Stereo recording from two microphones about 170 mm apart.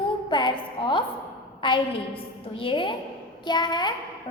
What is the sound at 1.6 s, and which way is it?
A woman's voice, 30° left (ahead or behind).